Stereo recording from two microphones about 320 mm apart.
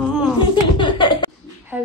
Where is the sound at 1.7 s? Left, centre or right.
Centre.